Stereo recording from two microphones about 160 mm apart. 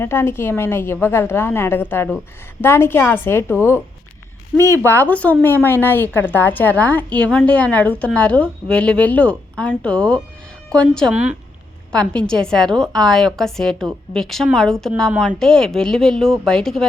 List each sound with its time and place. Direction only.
0.0 s a woman's voice: 15° left (ahead or behind)
11.1 s speech: 5° right (ahead or behind)
11.9 s a woman's voice: 5° left (ahead or behind)